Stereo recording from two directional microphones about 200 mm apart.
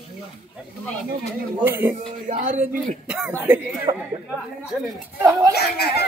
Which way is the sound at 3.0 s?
5° right (ahead or behind).